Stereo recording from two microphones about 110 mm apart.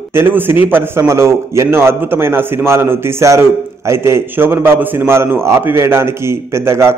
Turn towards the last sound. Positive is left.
turn(degrees=-25)  # may be behind; listen again after turning